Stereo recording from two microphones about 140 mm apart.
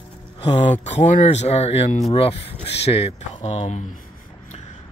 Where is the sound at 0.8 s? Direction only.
55° left (ahead or behind).